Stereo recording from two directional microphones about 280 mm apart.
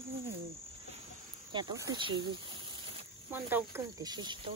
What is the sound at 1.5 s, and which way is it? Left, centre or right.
Speech, centre.